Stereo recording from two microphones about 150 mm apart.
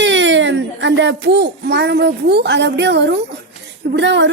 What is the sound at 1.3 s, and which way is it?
A woman's voice, 90° right.